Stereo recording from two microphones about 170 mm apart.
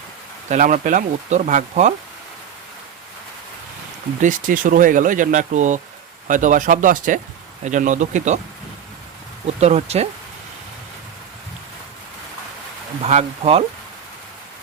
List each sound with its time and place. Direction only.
0.4 s speech: 45° right (ahead or behind)
4.2 s speech: 50° right (ahead or behind)
9.6 s speech: 40° right (ahead or behind)
13.0 s speech: 40° right (ahead or behind)